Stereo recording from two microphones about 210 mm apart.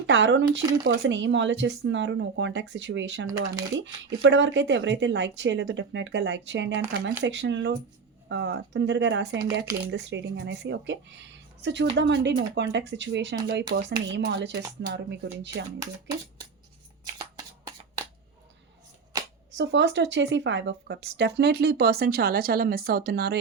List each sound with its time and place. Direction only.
0.1 s speech: 55° right (ahead or behind)
19.5 s speech: 55° right (ahead or behind)